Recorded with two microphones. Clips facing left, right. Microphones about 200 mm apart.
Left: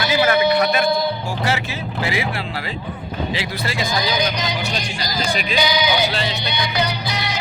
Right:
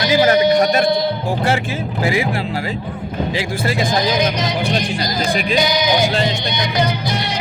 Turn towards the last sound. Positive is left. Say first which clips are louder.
# right 3 dB
turn(degrees=-50)  # may be behind; listen again after turning